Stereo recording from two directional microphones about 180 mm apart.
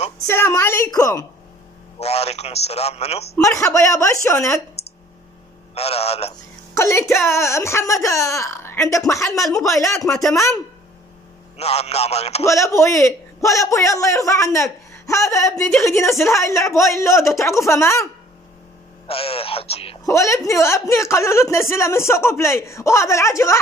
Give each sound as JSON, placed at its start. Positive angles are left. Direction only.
{"t": 0.3, "sound": "speech", "side_deg": 15}
{"t": 2.0, "sound": "a man's voice", "side_deg": 35}
{"t": 3.7, "sound": "speech", "side_deg": 15}
{"t": 5.8, "sound": "a man's voice", "side_deg": 35}
{"t": 6.7, "sound": "speech", "side_deg": 15}
{"t": 9.8, "sound": "speech", "side_deg": 0}
{"t": 10.3, "sound": "speech", "side_deg": 15}
{"t": 11.5, "sound": "a man's voice", "side_deg": 35}
{"t": 12.4, "sound": "speech", "side_deg": 15}
{"t": 19.0, "sound": "a man's voice", "side_deg": 30}
{"t": 20.1, "sound": "speech", "side_deg": 15}